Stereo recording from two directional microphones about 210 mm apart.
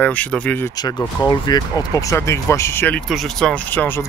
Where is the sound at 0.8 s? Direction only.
20° left (ahead or behind).